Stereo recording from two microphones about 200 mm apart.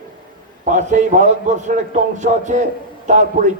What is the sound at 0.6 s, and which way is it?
A man's voice, 35° right (ahead or behind).